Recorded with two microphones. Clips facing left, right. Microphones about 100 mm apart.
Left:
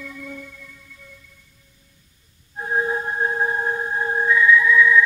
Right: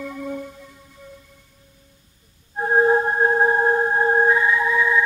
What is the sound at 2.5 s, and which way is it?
Music, 45° right (ahead or behind).